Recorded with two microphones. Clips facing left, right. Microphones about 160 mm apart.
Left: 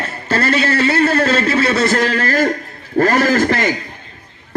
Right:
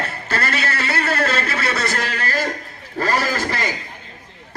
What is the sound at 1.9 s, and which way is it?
A man's voice, 45° left (ahead or behind).